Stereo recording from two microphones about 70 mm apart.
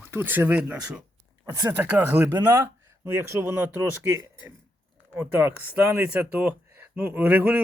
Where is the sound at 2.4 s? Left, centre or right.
Right.